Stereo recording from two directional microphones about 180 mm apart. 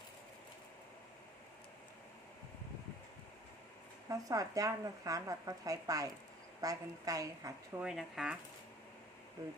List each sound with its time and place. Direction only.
4.1 s speech: 20° right (ahead or behind)
7.8 s speech: centre (ahead or behind)